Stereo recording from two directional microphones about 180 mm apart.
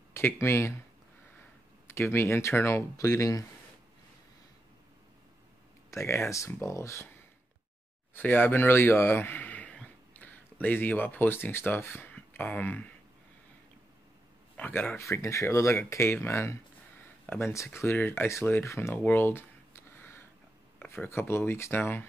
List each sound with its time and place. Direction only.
0.1 s speech: 15° left (ahead or behind)
1.9 s speech: 15° left (ahead or behind)
5.9 s speech: 15° left (ahead or behind)
8.1 s speech: 10° left (ahead or behind)
14.6 s speech: 10° left (ahead or behind)